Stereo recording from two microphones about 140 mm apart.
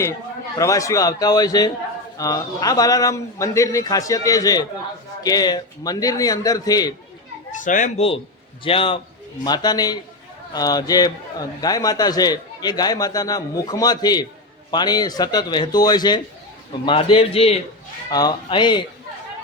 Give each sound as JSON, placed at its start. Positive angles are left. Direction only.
{"t": 0.6, "sound": "a man's voice", "side_deg": 25}
{"t": 7.5, "sound": "a child's voice", "side_deg": 65}
{"t": 7.9, "sound": "a man's voice", "side_deg": 40}
{"t": 18.1, "sound": "a man's voice", "side_deg": 30}